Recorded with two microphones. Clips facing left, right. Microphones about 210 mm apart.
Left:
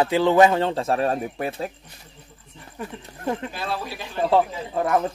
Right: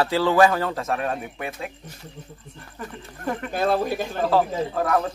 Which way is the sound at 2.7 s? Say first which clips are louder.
Left 2 dB; 20° left (ahead or behind).